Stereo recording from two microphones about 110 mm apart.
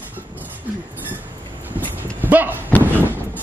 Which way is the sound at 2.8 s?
15° right (ahead or behind).